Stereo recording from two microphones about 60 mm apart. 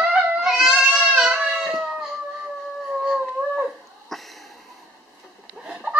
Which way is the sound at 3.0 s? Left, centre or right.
Centre.